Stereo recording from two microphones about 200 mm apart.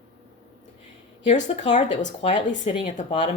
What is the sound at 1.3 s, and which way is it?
Speech, 35° left (ahead or behind).